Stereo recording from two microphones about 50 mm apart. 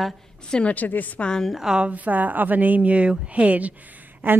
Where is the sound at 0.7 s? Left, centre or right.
Left.